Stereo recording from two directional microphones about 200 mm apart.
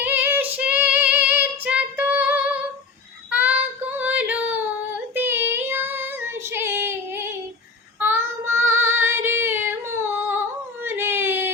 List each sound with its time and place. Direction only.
0.0 s female singing: 10° right (ahead or behind)
3.3 s child singing: 10° right (ahead or behind)
8.4 s female singing: 10° right (ahead or behind)
10.8 s a sound: 10° right (ahead or behind)